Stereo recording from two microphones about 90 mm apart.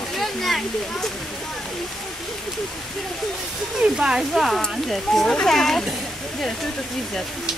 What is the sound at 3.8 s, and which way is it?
Speech, 10° right (ahead or behind).